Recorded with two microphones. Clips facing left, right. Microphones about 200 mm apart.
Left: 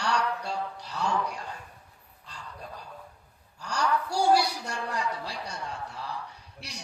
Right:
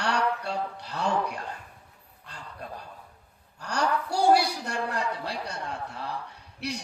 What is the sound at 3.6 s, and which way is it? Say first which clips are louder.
A man's voice: right 1 dB; 60° right (ahead or behind).